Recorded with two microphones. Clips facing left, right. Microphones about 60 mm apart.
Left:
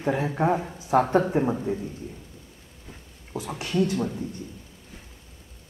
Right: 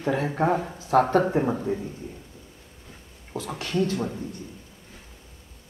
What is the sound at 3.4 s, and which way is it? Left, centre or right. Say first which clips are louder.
Speech: even; centre.